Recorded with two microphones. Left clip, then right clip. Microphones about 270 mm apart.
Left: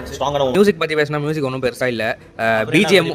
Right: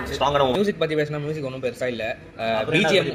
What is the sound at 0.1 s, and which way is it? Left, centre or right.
A man's voice, left.